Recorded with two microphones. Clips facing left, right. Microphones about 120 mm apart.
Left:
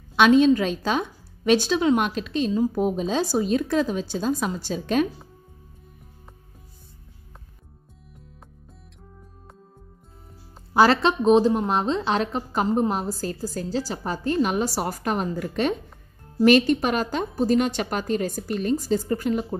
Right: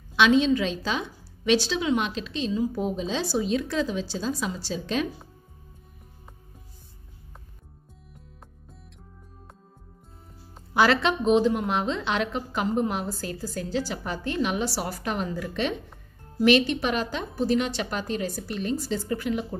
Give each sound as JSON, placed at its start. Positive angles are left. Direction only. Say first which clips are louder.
{"t": 0.1, "sound": "a woman's voice", "louder": "left 4 dB", "side_deg": 50}
{"t": 10.7, "sound": "a woman's voice", "louder": "left 3 dB", "side_deg": 35}